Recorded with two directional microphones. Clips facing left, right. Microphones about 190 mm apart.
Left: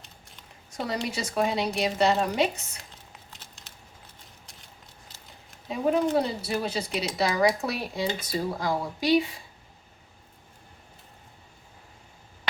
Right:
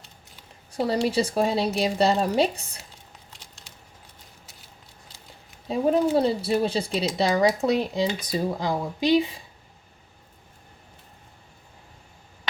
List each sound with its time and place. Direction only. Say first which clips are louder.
0.7 s a woman's voice: right 7 dB; 30° right (ahead or behind)
5.6 s a woman's voice: right 3 dB; 35° right (ahead or behind)